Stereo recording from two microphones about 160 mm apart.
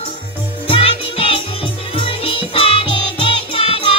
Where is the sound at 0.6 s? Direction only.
35° left (ahead or behind).